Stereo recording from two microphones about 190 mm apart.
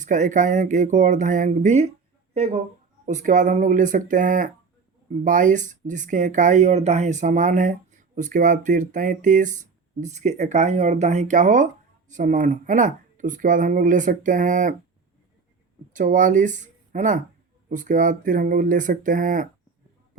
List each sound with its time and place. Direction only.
0.0 s speech: 40° right (ahead or behind)
15.9 s speech: 45° right (ahead or behind)